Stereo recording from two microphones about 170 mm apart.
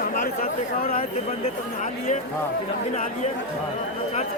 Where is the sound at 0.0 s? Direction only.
55° left (ahead or behind).